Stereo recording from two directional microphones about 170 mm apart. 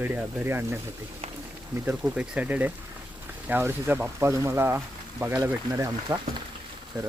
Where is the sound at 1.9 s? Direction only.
5° right (ahead or behind).